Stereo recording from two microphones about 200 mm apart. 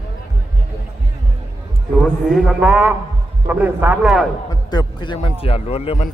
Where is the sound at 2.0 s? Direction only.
Centre (ahead or behind).